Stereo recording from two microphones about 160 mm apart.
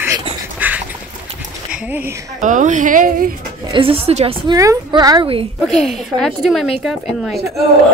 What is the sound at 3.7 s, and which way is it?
Speech, 35° right (ahead or behind).